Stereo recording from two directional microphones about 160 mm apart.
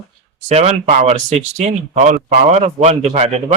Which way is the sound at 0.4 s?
45° right (ahead or behind).